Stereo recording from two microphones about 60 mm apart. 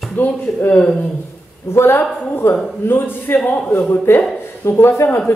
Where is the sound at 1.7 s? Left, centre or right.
Left.